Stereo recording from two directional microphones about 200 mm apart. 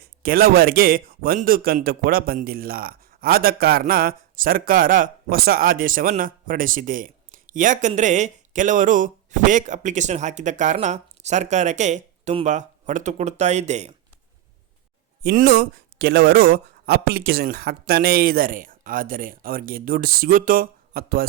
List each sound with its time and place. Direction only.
0.0 s a man's voice: 45° right (ahead or behind)
15.2 s a man's voice: 45° right (ahead or behind)